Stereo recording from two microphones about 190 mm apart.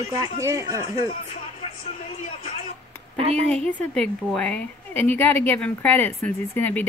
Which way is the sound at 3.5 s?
5° left (ahead or behind).